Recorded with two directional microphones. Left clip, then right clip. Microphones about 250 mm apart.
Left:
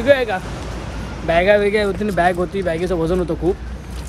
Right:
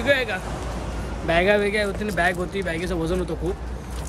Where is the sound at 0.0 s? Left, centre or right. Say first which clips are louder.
Left 6 dB; centre.